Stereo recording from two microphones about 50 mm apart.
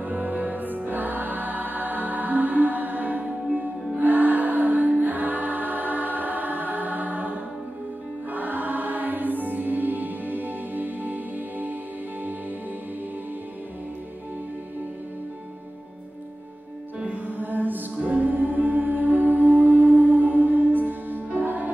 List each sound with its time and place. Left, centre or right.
0.0 s music: right
17.0 s music: right